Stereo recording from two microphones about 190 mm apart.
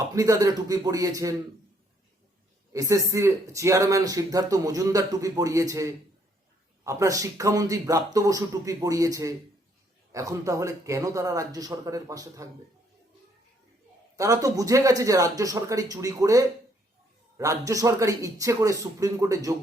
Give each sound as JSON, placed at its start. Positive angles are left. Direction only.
{"t": 0.1, "sound": "speech", "side_deg": -20}
{"t": 2.7, "sound": "speech", "side_deg": -15}
{"t": 14.2, "sound": "speech", "side_deg": -20}